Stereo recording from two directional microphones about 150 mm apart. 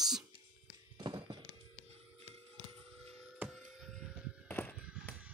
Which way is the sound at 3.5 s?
5° right (ahead or behind).